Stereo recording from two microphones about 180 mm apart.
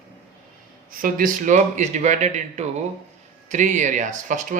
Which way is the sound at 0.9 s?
50° right (ahead or behind).